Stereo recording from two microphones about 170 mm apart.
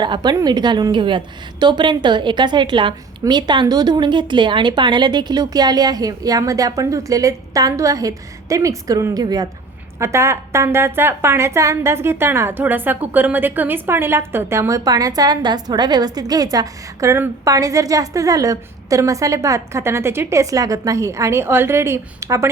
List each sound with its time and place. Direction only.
0.0 s a woman's voice: 25° right (ahead or behind)